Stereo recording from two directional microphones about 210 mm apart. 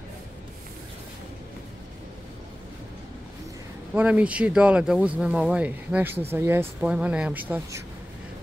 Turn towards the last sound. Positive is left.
turn(degrees=-10)  # may be behind; listen again after turning